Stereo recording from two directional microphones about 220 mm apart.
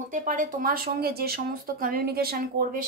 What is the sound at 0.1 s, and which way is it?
A woman's voice, 35° right (ahead or behind).